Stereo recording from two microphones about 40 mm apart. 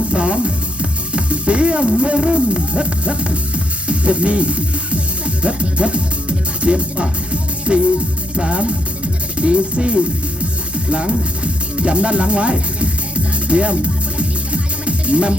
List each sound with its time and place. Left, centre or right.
0.1 s music: right
8.4 s speech: right
14.2 s music: right